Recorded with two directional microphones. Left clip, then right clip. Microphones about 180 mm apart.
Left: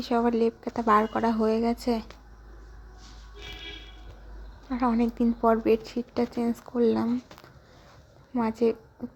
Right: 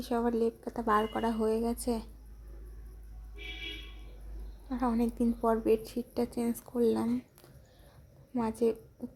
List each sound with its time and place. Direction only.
0.0 s a woman's voice: 15° left (ahead or behind)
4.7 s a woman's voice: 15° left (ahead or behind)
8.3 s a woman's voice: 15° left (ahead or behind)